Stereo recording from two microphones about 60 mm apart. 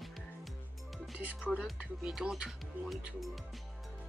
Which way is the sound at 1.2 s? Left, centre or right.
Right.